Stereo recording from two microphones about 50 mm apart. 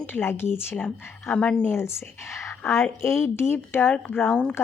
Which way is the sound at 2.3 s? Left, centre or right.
Left.